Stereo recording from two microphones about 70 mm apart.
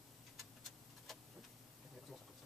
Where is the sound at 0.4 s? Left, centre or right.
Centre.